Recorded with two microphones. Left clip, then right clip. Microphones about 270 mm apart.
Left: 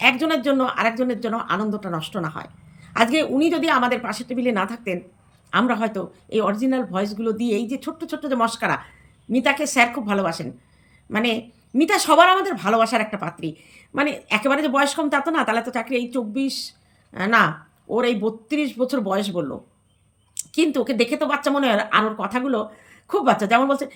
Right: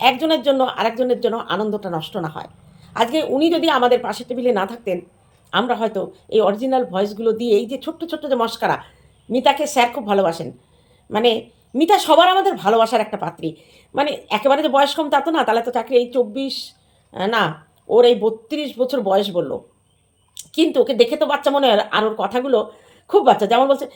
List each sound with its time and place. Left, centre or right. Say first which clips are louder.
0.0 s speech: right 3 dB; left